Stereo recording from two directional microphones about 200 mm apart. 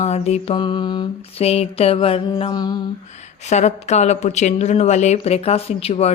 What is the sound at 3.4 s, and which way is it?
Speech, 35° left (ahead or behind).